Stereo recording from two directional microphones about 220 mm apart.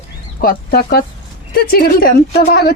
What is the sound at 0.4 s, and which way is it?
Speech, 45° left (ahead or behind).